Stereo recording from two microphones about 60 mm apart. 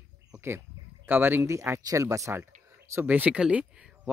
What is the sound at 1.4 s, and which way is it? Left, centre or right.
Speech, right.